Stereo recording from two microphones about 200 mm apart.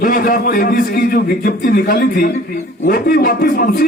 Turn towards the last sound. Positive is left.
turn(degrees=45)  # may be behind; listen again after turning